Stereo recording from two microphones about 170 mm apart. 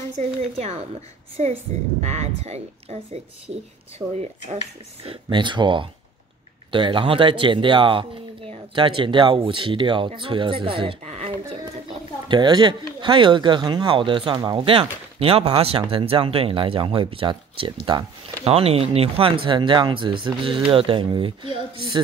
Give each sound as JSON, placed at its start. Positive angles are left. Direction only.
{"t": 0.2, "sound": "speech", "side_deg": -40}
{"t": 2.0, "sound": "speech", "side_deg": -40}
{"t": 4.6, "sound": "speech", "side_deg": -30}